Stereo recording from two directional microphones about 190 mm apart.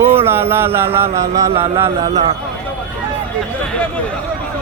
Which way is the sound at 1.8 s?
35° right (ahead or behind).